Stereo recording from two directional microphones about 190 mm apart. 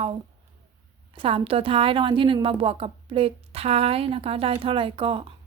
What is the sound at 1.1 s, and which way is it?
A woman's voice, 30° right (ahead or behind).